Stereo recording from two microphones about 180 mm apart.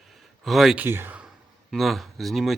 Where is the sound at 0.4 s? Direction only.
Centre (ahead or behind).